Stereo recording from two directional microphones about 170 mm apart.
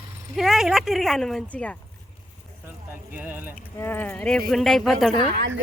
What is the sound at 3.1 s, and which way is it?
Speech, 10° right (ahead or behind).